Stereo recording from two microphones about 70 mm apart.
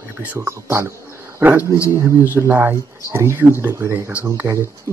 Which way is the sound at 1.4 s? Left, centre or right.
Right.